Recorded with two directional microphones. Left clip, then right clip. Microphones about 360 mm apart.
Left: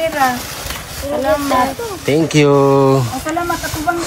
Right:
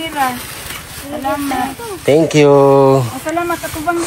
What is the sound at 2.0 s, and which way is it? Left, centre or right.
A man's voice, centre.